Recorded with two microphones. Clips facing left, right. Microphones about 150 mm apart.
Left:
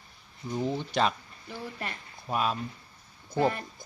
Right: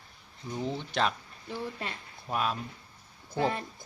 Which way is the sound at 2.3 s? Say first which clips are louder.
Left 2 dB; centre (ahead or behind).